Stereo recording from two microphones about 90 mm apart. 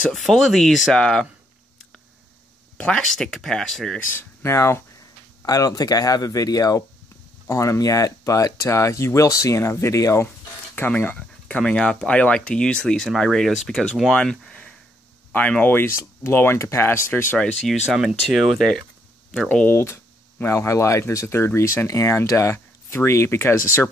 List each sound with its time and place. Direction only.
0.1 s speech: centre (ahead or behind)
2.8 s speech: 10° left (ahead or behind)
4.1 s speech: 25° left (ahead or behind)
5.4 s speech: 40° left (ahead or behind)
10.9 s speech: 15° left (ahead or behind)
17.9 s speech: centre (ahead or behind)
19.5 s speech: 15° left (ahead or behind)
19.8 s speech: 30° left (ahead or behind)